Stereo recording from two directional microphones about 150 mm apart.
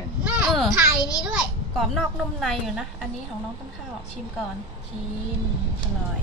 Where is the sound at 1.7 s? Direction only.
Centre (ahead or behind).